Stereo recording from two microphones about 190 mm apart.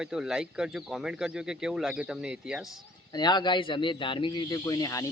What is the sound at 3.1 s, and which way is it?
A man's voice, 20° left (ahead or behind).